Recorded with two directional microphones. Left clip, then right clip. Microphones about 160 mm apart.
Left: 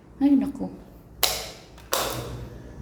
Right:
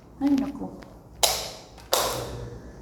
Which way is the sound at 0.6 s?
60° left (ahead or behind).